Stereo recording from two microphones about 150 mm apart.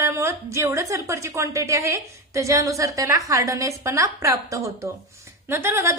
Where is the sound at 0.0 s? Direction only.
20° right (ahead or behind).